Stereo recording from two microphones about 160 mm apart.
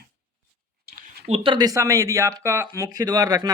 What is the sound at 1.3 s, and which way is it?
Speech, 30° right (ahead or behind).